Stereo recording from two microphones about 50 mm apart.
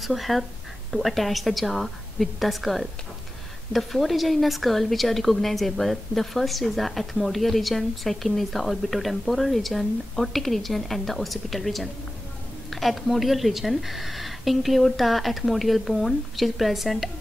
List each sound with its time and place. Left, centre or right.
0.0 s a woman's voice: centre